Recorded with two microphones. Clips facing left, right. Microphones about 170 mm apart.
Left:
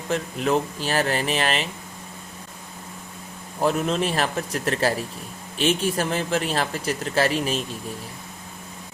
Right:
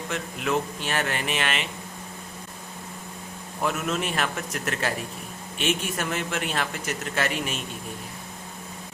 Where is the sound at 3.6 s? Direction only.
35° left (ahead or behind).